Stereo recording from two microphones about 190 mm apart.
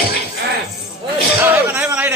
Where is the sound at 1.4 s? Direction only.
10° right (ahead or behind).